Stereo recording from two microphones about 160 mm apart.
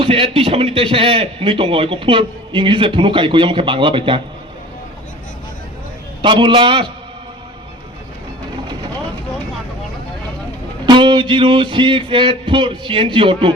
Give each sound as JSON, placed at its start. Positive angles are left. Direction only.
{"t": 0.0, "sound": "a man's voice", "side_deg": -35}
{"t": 6.2, "sound": "a man's voice", "side_deg": -30}
{"t": 10.8, "sound": "a man's voice", "side_deg": -30}